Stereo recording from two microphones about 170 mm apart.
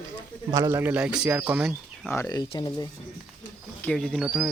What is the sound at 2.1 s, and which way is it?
Speech, 20° left (ahead or behind).